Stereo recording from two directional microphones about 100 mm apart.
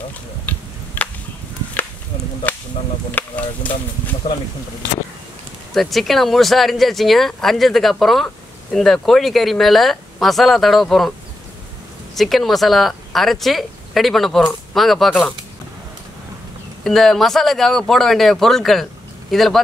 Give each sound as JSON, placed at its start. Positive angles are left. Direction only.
{"t": 0.5, "sound": "tick-tock", "side_deg": 15}
{"t": 1.0, "sound": "chop", "side_deg": 15}
{"t": 3.2, "sound": "speech", "side_deg": 15}
{"t": 5.7, "sound": "speech", "side_deg": 0}
{"t": 12.2, "sound": "speech", "side_deg": 0}
{"t": 16.8, "sound": "speech", "side_deg": 0}